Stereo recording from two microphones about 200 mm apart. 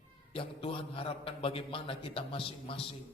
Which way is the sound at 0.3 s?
25° left (ahead or behind).